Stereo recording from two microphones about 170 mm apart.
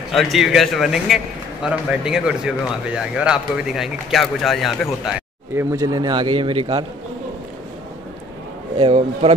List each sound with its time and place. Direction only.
0.1 s a man's voice: centre (ahead or behind)
5.5 s a man's voice: 15° right (ahead or behind)
8.7 s speech: 35° right (ahead or behind)